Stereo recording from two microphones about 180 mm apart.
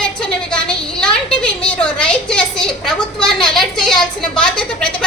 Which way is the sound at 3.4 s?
5° left (ahead or behind).